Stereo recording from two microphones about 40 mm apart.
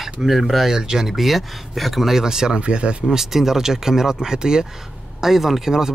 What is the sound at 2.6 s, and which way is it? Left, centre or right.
Speech, right.